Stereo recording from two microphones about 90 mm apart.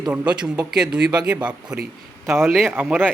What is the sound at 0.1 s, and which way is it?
Speech, 15° right (ahead or behind).